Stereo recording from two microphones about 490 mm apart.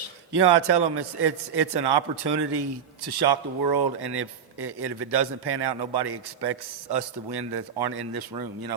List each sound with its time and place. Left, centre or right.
0.3 s a man's voice: right